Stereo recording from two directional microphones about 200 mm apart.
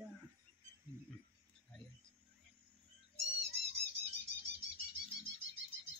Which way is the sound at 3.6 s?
55° right (ahead or behind).